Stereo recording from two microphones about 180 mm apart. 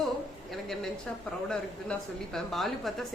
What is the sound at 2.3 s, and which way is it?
Speech, centre (ahead or behind).